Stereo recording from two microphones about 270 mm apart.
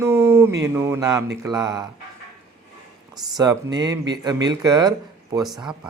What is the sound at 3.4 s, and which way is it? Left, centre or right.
Speech, centre.